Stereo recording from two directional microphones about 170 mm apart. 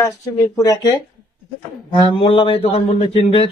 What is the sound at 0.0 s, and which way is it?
Speech, 20° left (ahead or behind).